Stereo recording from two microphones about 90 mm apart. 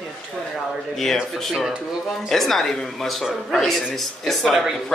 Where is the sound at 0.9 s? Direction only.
5° left (ahead or behind).